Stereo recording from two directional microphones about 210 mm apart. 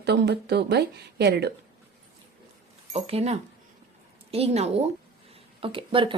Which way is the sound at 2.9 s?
30° right (ahead or behind).